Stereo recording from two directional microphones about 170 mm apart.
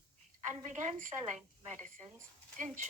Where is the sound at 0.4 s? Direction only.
45° right (ahead or behind).